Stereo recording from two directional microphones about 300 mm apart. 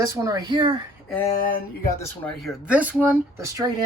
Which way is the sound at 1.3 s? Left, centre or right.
Left.